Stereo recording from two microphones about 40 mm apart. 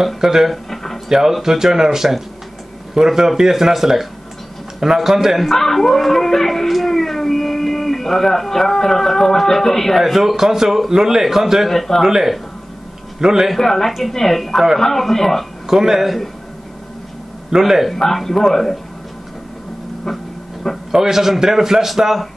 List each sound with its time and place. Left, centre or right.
0.2 s a man's voice: centre
0.5 s a sound: centre
1.0 s a man's voice: centre
5.5 s speech: centre
9.9 s a man's voice: centre
11.7 s a man's voice: centre
12.0 s a man's voice: centre
13.6 s a man's voice: centre
15.7 s a man's voice: centre
17.5 s a man's voice: centre
17.9 s a man's voice: centre
20.1 s dog: centre
20.9 s a man's voice: centre